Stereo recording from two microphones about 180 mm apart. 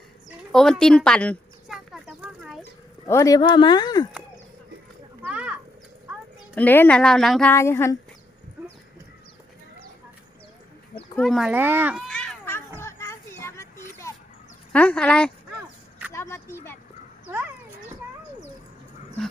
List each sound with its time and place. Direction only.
0.5 s a sound: 5° left (ahead or behind)
3.1 s speech: 15° left (ahead or behind)
5.2 s a sound: 5° right (ahead or behind)
6.6 s speech: 10° left (ahead or behind)
7.5 s speech: 15° left (ahead or behind)
11.2 s a child's voice: centre (ahead or behind)
12.0 s cat: 5° left (ahead or behind)
12.8 s children playing: 15° left (ahead or behind)
14.7 s speech: 5° left (ahead or behind)
16.1 s a sound: 15° left (ahead or behind)